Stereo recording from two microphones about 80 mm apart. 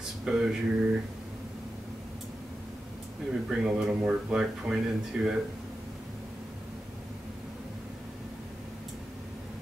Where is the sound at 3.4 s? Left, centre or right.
Centre.